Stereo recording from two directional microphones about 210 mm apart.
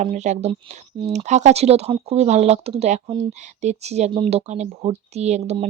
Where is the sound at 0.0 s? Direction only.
35° right (ahead or behind).